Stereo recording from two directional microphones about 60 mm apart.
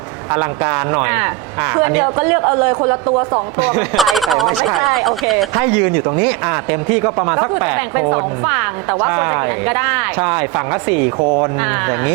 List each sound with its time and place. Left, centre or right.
0.3 s speech: right
3.9 s speech: centre
5.6 s speech: right
11.2 s speech: right
11.6 s speech: right